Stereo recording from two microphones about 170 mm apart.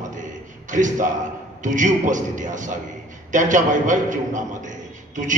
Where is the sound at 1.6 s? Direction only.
50° right (ahead or behind).